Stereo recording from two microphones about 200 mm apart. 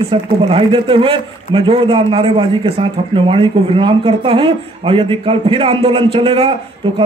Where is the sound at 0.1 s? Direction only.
25° right (ahead or behind).